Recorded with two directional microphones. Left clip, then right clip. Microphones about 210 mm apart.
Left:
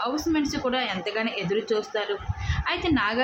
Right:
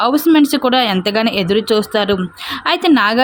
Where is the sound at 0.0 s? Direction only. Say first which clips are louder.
Right 14 dB; 50° right (ahead or behind).